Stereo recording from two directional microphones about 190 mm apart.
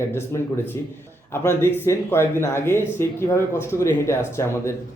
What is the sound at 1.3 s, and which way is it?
A man's voice, 10° left (ahead or behind).